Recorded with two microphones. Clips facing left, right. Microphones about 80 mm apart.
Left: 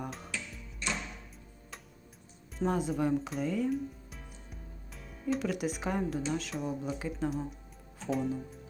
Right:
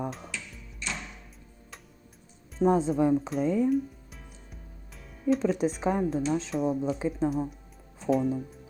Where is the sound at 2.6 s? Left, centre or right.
Centre.